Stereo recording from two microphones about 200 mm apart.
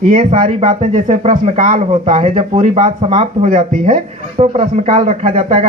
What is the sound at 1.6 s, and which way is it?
Speech, 35° right (ahead or behind).